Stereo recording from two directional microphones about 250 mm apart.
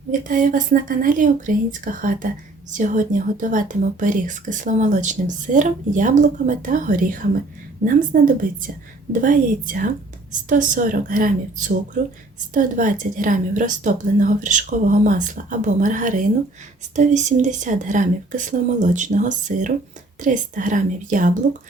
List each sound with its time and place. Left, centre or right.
0.1 s a woman's voice: right